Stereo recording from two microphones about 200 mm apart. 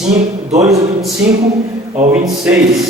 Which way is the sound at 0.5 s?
15° right (ahead or behind).